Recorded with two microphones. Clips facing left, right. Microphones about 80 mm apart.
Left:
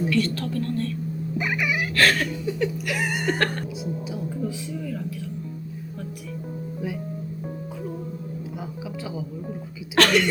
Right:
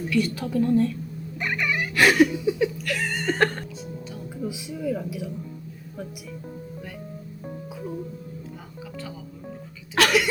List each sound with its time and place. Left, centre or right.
0.1 s speech: centre
1.4 s wail: centre
2.0 s speech: centre
2.8 s chuckle: centre
3.3 s speech: centre
9.9 s speech: centre